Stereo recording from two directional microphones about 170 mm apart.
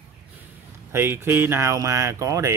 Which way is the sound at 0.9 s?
15° right (ahead or behind).